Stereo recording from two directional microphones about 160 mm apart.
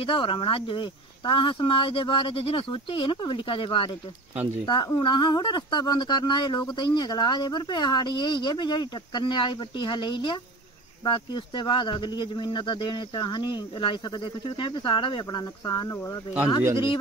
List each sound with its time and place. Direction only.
0.0 s speech: 30° left (ahead or behind)